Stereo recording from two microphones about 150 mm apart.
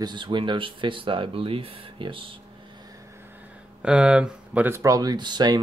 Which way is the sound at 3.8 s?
5° right (ahead or behind).